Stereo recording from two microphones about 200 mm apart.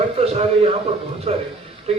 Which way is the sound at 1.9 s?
30° right (ahead or behind).